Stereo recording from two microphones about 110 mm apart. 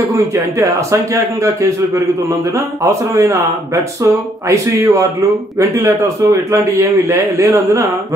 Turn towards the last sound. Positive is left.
turn(degrees=-25)  # may be behind; listen again after turning